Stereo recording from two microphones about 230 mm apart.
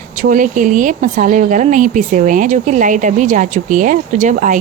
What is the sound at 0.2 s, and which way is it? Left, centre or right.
Speech, right.